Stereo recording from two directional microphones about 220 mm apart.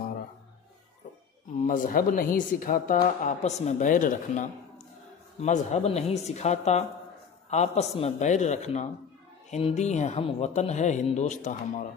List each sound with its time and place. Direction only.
1.6 s a woman's voice: 35° left (ahead or behind)